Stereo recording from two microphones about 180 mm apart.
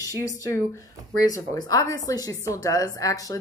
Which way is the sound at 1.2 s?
20° left (ahead or behind).